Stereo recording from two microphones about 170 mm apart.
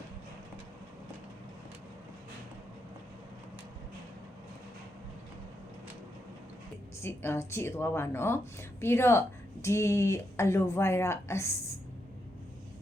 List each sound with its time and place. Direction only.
7.0 s speech: 15° left (ahead or behind)